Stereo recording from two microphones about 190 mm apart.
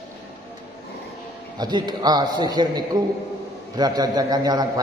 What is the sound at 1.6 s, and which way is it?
A man's voice, 20° right (ahead or behind).